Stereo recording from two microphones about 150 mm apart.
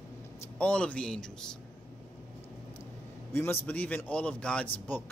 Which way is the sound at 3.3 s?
15° left (ahead or behind).